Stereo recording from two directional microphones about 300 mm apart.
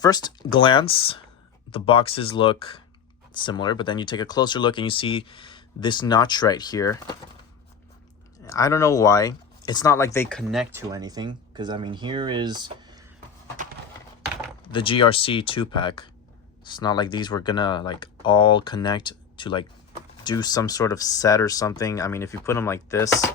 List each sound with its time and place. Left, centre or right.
0.0 s speech: centre
8.4 s speech: centre
14.6 s speech: centre